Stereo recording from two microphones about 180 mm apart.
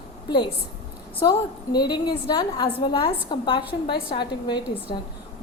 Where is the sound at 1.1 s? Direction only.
25° left (ahead or behind).